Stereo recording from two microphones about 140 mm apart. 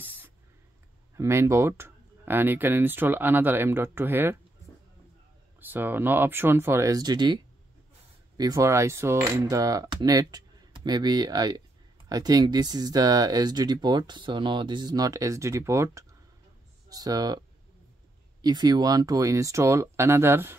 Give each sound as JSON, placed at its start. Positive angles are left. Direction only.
{"t": 0.0, "sound": "a sound", "side_deg": -15}
{"t": 1.1, "sound": "speech", "side_deg": -20}
{"t": 5.6, "sound": "speech", "side_deg": -15}
{"t": 8.4, "sound": "speech", "side_deg": -25}
{"t": 18.4, "sound": "speech", "side_deg": -30}